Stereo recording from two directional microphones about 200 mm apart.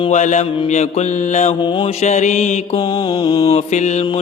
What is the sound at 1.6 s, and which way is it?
Mantra, 25° left (ahead or behind).